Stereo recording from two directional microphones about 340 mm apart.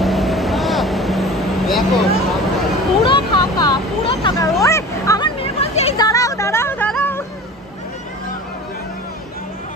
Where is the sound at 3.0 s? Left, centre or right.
Centre.